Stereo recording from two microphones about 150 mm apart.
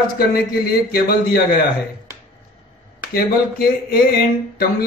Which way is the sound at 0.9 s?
90° left.